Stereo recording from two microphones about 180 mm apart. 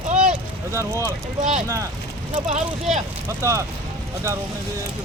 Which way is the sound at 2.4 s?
40° right (ahead or behind).